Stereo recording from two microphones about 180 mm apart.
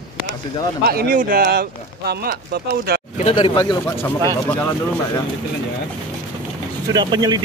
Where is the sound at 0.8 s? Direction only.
55° right (ahead or behind).